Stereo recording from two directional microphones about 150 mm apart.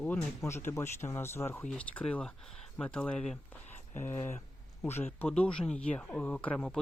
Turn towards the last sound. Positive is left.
turn(degrees=5)  # may be behind; listen again after turning